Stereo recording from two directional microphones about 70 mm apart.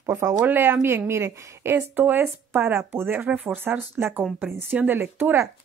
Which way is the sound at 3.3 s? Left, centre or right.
Centre.